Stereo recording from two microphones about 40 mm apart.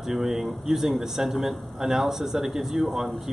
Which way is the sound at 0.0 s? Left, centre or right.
Centre.